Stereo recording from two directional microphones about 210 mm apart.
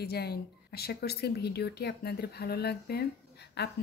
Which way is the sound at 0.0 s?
50° left (ahead or behind).